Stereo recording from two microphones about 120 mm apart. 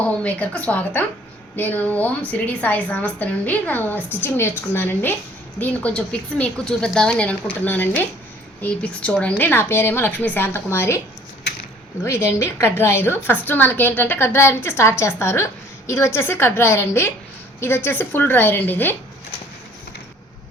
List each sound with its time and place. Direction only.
0.2 s a woman's voice: 10° left (ahead or behind)
12.0 s a woman's voice: 20° left (ahead or behind)